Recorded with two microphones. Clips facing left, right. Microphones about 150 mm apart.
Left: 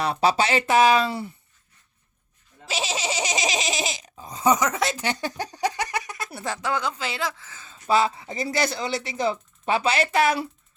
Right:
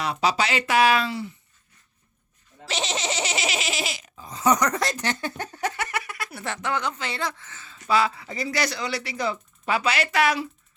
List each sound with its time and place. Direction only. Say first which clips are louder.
0.0 s speech: left 3 dB; 30° left (ahead or behind)
2.6 s speech: even; 10° left (ahead or behind)
4.1 s a sound: left 1 dB; 20° left (ahead or behind)
4.5 s speech: even; centre (ahead or behind)
5.0 s speech: left 1 dB; 15° left (ahead or behind)
7.7 s speech: left 1 dB; 25° left (ahead or behind)